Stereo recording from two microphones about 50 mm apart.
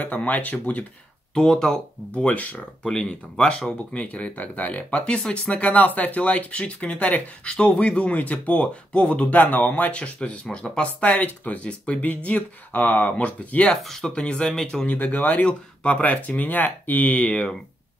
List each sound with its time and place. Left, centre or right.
0.0 s speech: left
1.3 s speech: centre
2.2 s speech: left
2.8 s speech: centre; by 4.8 s left
4.9 s speech: left
10.5 s speech: centre
10.8 s speech: left
13.8 s speech: centre
14.9 s speech: left
17.2 s speech: centre